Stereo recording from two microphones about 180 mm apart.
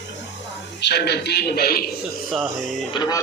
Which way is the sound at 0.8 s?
65° left (ahead or behind).